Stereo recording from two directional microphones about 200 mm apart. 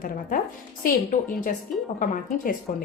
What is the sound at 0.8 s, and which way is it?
Speech, 45° left (ahead or behind).